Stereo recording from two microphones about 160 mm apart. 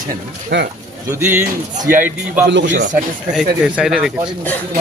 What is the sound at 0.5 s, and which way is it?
Speech, 90° right.